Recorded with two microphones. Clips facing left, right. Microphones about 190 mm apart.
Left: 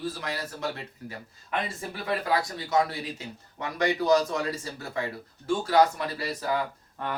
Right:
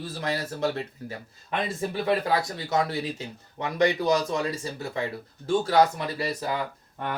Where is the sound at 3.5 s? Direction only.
20° right (ahead or behind).